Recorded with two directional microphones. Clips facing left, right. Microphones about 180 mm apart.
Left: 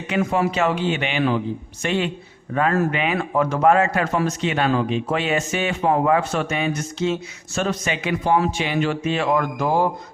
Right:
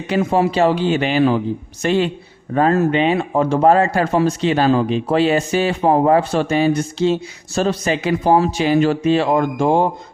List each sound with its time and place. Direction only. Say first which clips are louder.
0.1 s speech: right 4 dB; 30° right (ahead or behind)